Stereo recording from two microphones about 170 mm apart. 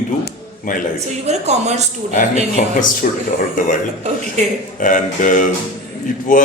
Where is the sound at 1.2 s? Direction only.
40° right (ahead or behind).